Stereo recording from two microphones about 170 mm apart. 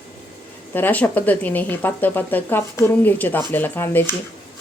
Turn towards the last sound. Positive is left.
turn(degrees=15)  # may be behind; listen again after turning